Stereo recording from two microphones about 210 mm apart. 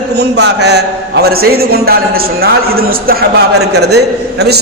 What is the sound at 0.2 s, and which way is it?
A man's voice, 55° right (ahead or behind).